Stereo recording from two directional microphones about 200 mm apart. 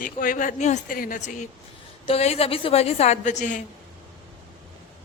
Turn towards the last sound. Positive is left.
turn(degrees=40)  # may be behind; listen again after turning